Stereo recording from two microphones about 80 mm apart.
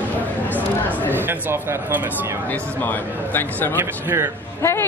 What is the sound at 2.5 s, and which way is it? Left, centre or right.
Speech, left.